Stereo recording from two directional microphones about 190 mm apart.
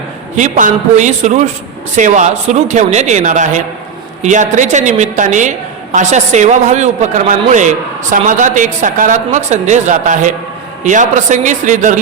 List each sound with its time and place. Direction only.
0.3 s a woman's voice: 40° right (ahead or behind)